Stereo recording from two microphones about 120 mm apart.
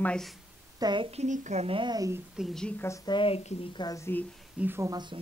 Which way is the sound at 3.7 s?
30° left (ahead or behind).